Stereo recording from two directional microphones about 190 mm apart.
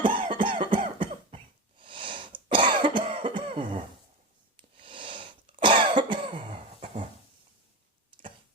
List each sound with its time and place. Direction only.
0.0 s cough: 25° right (ahead or behind)